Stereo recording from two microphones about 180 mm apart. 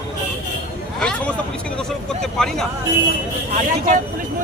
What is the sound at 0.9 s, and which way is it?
A man's voice, 5° left (ahead or behind).